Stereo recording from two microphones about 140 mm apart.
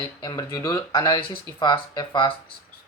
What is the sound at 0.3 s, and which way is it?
Speech, 30° left (ahead or behind).